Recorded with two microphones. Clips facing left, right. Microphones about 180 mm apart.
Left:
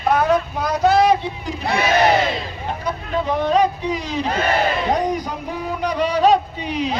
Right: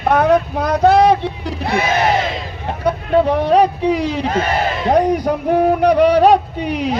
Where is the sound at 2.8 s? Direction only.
65° right (ahead or behind).